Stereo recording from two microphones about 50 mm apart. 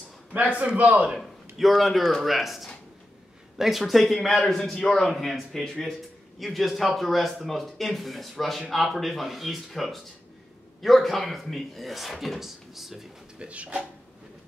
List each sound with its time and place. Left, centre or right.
0.3 s a man's voice: right
1.8 s speech: centre
4.9 s speech: centre
13.4 s speech: right